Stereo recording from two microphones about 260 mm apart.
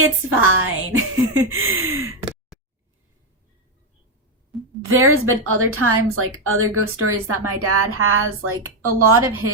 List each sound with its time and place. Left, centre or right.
0.0 s a woman's voice: right
4.9 s a woman's voice: right